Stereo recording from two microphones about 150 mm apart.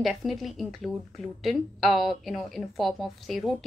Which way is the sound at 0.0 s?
Centre (ahead or behind).